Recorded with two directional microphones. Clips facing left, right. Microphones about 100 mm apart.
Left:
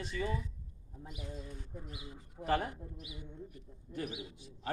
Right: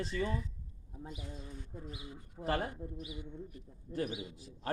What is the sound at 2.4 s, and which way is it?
Speech, 35° right (ahead or behind).